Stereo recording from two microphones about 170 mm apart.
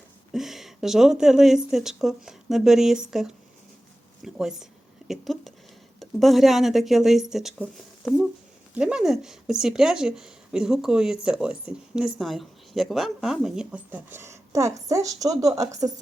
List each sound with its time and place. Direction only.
0.3 s speech: centre (ahead or behind); by 15.9 s 20° right (ahead or behind)